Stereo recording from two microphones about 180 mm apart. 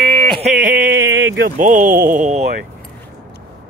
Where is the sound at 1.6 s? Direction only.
45° right (ahead or behind).